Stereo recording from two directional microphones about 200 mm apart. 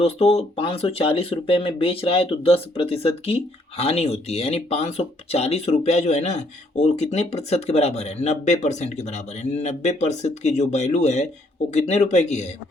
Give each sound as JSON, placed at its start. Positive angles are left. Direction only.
{"t": 0.0, "sound": "speech", "side_deg": 30}